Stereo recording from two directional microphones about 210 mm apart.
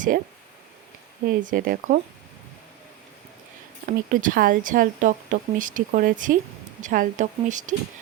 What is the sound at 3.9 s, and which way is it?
Speech, 40° right (ahead or behind).